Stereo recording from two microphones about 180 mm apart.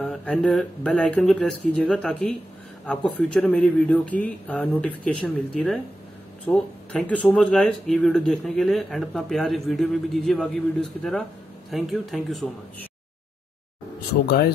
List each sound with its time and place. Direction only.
0.0 s speech: 5° left (ahead or behind)
14.2 s speech: 55° left (ahead or behind)